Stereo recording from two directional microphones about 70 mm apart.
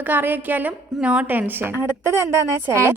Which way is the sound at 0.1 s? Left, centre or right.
Right.